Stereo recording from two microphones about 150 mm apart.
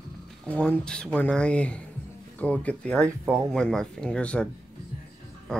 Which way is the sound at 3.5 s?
5° left (ahead or behind).